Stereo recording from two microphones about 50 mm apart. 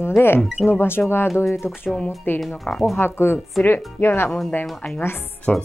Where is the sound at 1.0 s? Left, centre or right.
Left.